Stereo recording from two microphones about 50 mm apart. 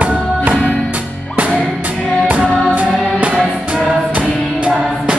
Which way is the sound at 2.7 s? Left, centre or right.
Right.